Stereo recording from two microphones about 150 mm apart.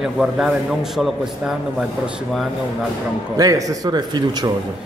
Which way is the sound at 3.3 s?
25° right (ahead or behind).